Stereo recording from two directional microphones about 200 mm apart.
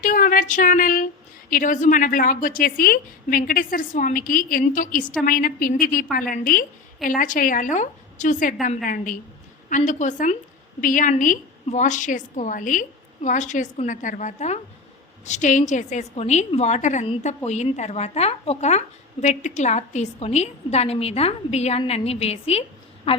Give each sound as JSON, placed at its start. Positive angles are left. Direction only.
{"t": 0.0, "sound": "a woman's voice", "side_deg": 45}